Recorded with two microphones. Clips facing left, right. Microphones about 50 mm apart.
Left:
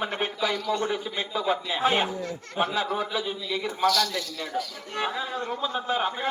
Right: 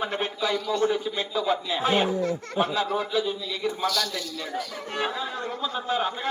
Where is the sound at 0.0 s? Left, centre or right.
Centre.